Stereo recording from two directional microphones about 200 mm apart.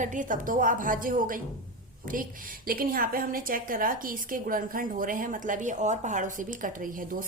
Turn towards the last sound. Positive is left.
turn(degrees=-40)  # may be behind; listen again after turning